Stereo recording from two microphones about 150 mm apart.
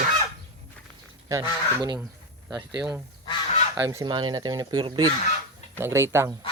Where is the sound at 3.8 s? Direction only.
20° right (ahead or behind).